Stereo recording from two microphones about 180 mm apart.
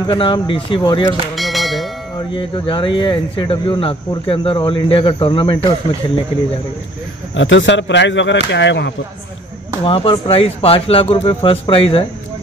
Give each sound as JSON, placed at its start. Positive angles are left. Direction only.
{"t": 0.0, "sound": "speech", "side_deg": 25}
{"t": 1.3, "sound": "bell", "side_deg": 0}
{"t": 2.3, "sound": "speech", "side_deg": 25}
{"t": 7.3, "sound": "speech", "side_deg": 90}
{"t": 9.8, "sound": "speech", "side_deg": 30}